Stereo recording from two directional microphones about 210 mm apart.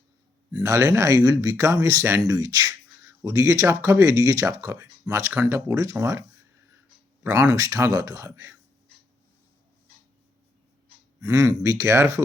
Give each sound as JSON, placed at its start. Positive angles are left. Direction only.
{"t": 0.5, "sound": "speech", "side_deg": -15}
{"t": 7.3, "sound": "speech", "side_deg": -10}
{"t": 11.2, "sound": "speech", "side_deg": -15}